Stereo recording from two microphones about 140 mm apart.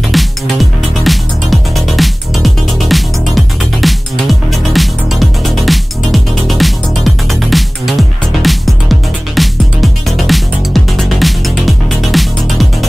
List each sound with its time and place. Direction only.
0.1 s music: centre (ahead or behind)